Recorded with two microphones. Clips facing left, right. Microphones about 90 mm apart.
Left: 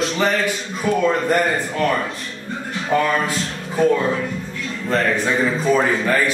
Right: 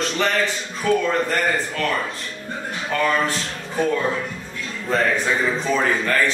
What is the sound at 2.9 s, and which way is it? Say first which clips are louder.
Speech: left 4 dB; 20° left (ahead or behind).